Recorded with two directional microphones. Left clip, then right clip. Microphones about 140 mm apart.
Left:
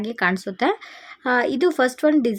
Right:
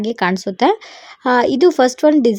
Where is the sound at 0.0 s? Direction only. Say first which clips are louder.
Right 4 dB; 15° right (ahead or behind).